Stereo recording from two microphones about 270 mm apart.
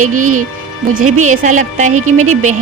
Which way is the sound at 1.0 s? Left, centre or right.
Right.